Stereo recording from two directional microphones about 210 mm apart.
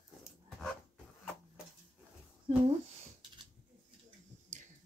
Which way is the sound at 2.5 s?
25° right (ahead or behind).